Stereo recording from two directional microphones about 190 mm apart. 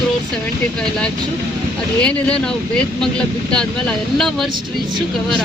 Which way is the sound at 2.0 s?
5° left (ahead or behind).